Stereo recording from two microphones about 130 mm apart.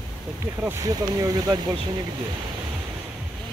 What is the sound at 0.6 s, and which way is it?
Speech, 25° right (ahead or behind).